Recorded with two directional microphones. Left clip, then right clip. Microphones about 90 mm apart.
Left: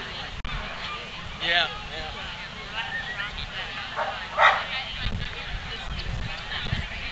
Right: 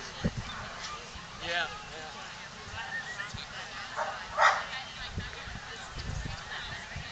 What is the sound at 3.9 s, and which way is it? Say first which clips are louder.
Bow-wow: left 5 dB; 10° right (ahead or behind).